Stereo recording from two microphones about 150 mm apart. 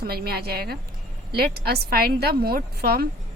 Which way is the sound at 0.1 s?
90° right.